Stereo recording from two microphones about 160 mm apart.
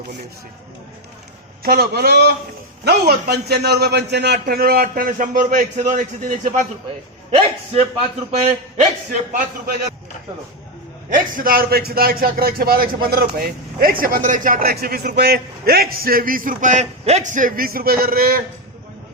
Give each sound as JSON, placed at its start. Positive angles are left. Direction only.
{"t": 1.6, "sound": "a man's voice", "side_deg": -75}
{"t": 11.1, "sound": "a man's voice", "side_deg": -60}